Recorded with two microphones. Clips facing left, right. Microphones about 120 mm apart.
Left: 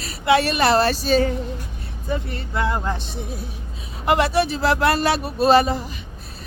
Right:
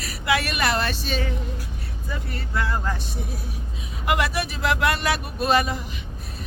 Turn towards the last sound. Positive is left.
turn(degrees=30)  # may be behind; listen again after turning